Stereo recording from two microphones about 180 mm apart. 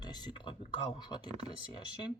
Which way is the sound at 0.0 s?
25° left (ahead or behind).